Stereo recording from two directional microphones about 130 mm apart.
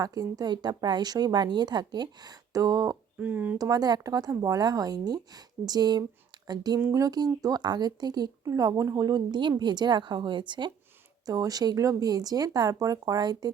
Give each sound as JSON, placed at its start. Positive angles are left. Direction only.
{"t": 0.0, "sound": "a woman's voice", "side_deg": -30}
{"t": 3.2, "sound": "speech", "side_deg": -10}
{"t": 3.6, "sound": "a woman's voice", "side_deg": -30}
{"t": 6.7, "sound": "speech", "side_deg": -15}
{"t": 7.0, "sound": "a woman's voice", "side_deg": -30}